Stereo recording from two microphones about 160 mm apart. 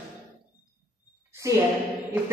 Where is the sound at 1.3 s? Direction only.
20° right (ahead or behind).